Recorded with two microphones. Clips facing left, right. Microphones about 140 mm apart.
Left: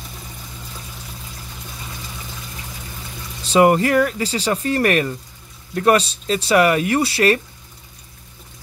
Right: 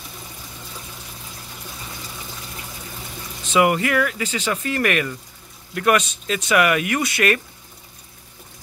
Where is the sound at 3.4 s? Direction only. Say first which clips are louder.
Left 4 dB; 35° left (ahead or behind).